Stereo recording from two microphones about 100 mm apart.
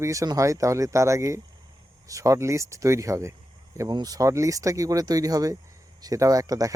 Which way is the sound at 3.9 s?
40° right (ahead or behind).